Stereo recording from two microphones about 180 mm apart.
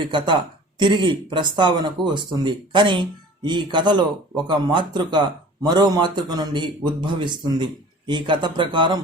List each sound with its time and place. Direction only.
0.0 s a man's voice: 25° right (ahead or behind)